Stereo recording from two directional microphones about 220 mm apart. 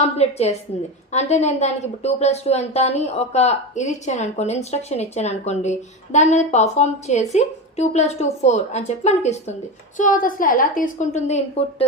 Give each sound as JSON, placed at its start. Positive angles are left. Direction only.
{"t": 0.0, "sound": "a woman's voice", "side_deg": 30}